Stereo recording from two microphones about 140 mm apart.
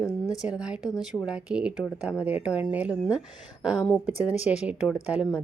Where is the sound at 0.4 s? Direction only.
5° right (ahead or behind).